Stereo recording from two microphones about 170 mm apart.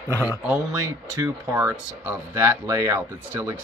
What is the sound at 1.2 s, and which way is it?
Speech, 10° right (ahead or behind).